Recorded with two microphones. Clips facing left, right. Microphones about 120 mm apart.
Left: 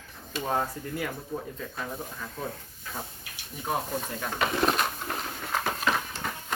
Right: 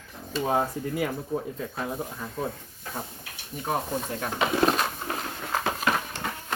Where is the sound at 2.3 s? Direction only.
5° right (ahead or behind).